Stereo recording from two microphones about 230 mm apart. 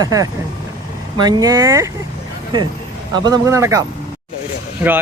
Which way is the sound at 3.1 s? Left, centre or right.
Centre.